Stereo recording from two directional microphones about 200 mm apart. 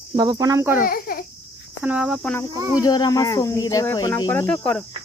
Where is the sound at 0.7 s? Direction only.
45° left (ahead or behind).